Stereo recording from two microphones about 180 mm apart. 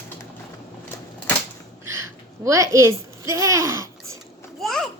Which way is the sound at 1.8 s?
15° right (ahead or behind).